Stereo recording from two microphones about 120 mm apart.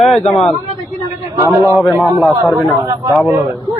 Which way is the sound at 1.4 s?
20° right (ahead or behind).